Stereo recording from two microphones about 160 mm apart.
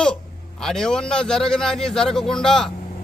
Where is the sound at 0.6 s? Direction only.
5° left (ahead or behind).